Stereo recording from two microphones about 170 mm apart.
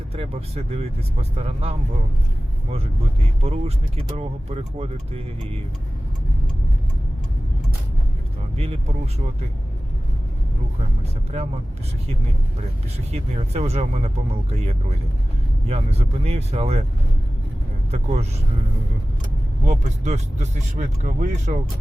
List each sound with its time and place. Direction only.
0.1 s speech: 35° right (ahead or behind)
3.4 s speech: 40° right (ahead or behind)
8.5 s speech: 35° right (ahead or behind)
13.1 s speech: 40° right (ahead or behind)
15.6 s speech: 40° right (ahead or behind)
17.9 s speech: 40° right (ahead or behind)
19.6 s speech: 40° right (ahead or behind)